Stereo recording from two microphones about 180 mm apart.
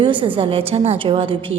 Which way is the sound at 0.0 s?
30° right (ahead or behind).